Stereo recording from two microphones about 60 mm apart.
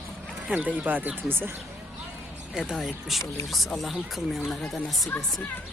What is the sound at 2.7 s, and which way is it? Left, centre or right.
Speech, centre.